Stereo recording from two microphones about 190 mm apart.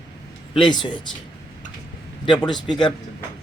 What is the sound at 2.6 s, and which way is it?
Speech, 25° left (ahead or behind).